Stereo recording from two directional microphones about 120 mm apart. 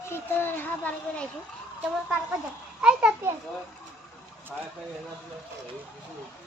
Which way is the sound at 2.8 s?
10° right (ahead or behind).